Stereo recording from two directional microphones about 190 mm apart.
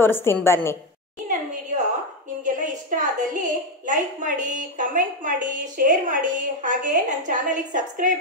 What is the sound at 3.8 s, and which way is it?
A woman's voice, 45° right (ahead or behind).